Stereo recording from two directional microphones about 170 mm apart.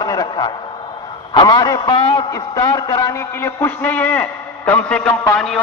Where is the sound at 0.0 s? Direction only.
25° left (ahead or behind).